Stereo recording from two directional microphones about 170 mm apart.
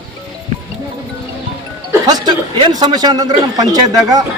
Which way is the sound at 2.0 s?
25° right (ahead or behind).